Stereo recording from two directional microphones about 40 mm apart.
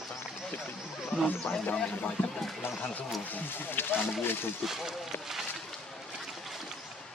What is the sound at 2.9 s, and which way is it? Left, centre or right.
Speech, left.